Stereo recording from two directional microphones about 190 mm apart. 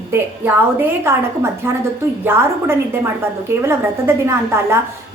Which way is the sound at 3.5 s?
15° right (ahead or behind).